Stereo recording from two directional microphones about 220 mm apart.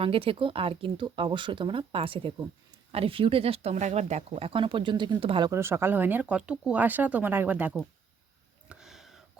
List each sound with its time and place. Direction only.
0.0 s speech: 25° right (ahead or behind)
5.5 s speech: 10° right (ahead or behind)
8.7 s a sound: centre (ahead or behind)